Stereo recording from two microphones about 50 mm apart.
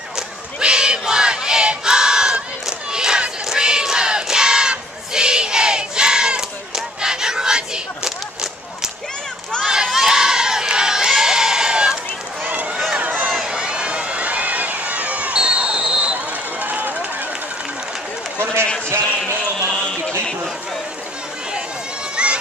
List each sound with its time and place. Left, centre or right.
0.1 s crowd: centre
9.9 s crowd: centre
13.0 s run: right
13.3 s run: centre
16.6 s run: right
18.4 s run: right
22.1 s run: right